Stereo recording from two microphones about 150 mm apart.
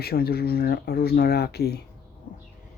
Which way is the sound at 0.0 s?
90° left.